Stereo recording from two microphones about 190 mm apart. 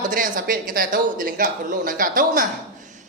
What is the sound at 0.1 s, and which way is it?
A man's voice, 45° right (ahead or behind).